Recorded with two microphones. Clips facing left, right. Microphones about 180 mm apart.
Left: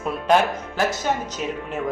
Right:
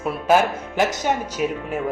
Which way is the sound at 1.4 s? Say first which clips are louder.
Right 5 dB; 5° right (ahead or behind).